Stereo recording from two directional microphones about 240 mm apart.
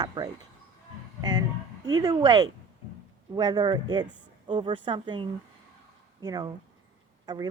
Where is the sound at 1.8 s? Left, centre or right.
Centre.